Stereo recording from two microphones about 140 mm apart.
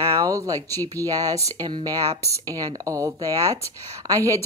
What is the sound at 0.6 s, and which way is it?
Speech, 15° left (ahead or behind).